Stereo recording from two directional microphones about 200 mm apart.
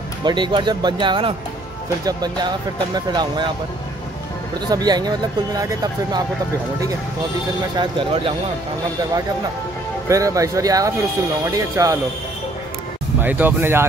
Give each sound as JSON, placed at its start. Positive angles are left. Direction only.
{"t": 0.2, "sound": "speech", "side_deg": -25}
{"t": 4.6, "sound": "speech", "side_deg": -20}
{"t": 7.7, "sound": "speech", "side_deg": -25}
{"t": 10.0, "sound": "speech", "side_deg": -15}
{"t": 13.2, "sound": "speech", "side_deg": -10}